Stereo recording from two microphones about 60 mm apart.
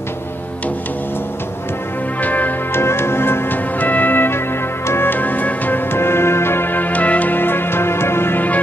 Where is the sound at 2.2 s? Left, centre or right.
Left.